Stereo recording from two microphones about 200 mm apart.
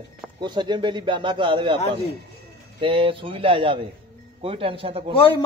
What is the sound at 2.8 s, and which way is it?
Speech, 25° right (ahead or behind).